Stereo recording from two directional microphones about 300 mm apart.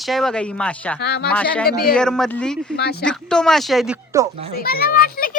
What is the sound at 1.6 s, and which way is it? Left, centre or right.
Speech, left.